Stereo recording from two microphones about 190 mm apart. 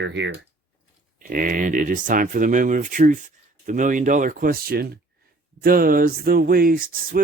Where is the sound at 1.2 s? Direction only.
45° right (ahead or behind).